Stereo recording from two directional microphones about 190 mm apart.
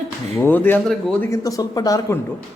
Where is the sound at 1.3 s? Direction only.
20° left (ahead or behind).